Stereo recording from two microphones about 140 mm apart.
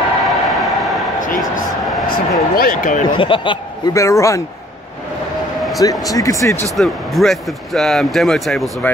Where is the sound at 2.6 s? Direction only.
70° left (ahead or behind).